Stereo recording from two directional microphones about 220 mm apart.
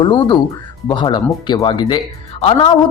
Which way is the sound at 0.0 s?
20° left (ahead or behind).